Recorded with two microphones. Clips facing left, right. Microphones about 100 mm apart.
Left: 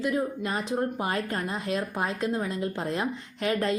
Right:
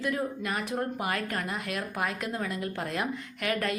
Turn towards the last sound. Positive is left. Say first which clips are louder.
# left 4 dB
turn(degrees=25)  # may be behind; listen again after turning